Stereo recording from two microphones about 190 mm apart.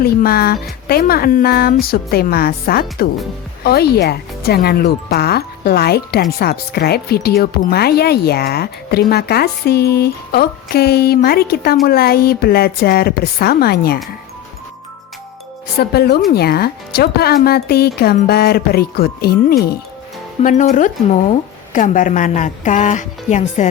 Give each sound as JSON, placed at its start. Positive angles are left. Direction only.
{"t": 0.0, "sound": "speech", "side_deg": 50}
{"t": 15.8, "sound": "speech", "side_deg": 55}
{"t": 20.4, "sound": "a woman's voice", "side_deg": 40}